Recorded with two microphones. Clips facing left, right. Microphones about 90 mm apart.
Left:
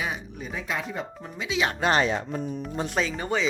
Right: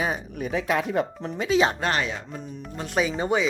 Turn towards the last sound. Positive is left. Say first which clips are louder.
# right 3 dB
turn(degrees=-15)  # may be behind; listen again after turning